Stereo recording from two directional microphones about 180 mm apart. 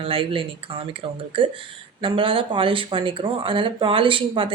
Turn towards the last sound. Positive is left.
turn(degrees=-30)  # may be behind; listen again after turning